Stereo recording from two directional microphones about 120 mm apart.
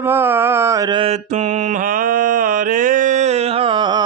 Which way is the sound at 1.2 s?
90° right.